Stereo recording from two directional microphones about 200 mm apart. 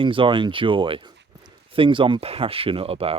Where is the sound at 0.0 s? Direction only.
25° right (ahead or behind).